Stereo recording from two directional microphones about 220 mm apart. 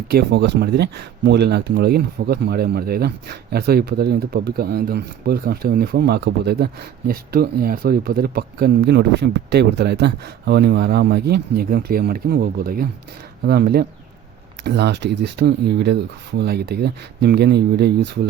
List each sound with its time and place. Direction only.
0.1 s speech: 50° right (ahead or behind)